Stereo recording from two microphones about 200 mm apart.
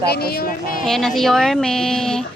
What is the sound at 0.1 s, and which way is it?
Speech, 50° left (ahead or behind).